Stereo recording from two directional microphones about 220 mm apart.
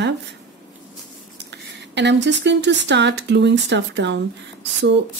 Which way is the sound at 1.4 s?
50° right (ahead or behind).